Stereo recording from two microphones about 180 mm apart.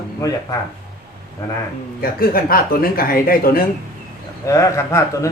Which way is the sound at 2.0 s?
55° left (ahead or behind).